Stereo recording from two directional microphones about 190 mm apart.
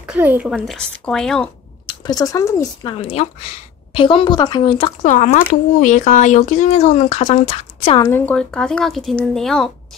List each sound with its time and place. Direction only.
0.0 s speech: 10° right (ahead or behind)
2.0 s speech: 20° left (ahead or behind)
5.0 s speech: 40° left (ahead or behind)
8.1 s speech: 5° left (ahead or behind)